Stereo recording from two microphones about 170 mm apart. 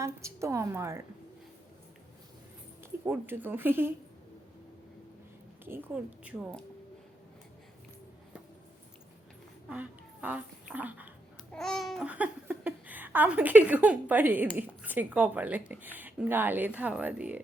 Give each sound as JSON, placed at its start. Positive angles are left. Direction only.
{"t": 0.0, "sound": "speech", "side_deg": -15}
{"t": 3.0, "sound": "speech", "side_deg": -10}
{"t": 5.6, "sound": "speech", "side_deg": -10}
{"t": 9.6, "sound": "speech", "side_deg": -10}
{"t": 11.5, "sound": "speech", "side_deg": 5}